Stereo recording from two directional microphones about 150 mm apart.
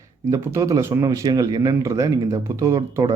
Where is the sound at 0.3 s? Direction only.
20° right (ahead or behind).